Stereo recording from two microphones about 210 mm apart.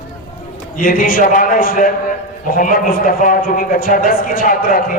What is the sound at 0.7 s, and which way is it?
A man's voice, 40° left (ahead or behind).